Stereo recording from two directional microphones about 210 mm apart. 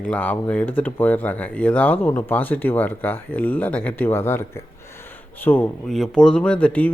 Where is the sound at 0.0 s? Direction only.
5° left (ahead or behind).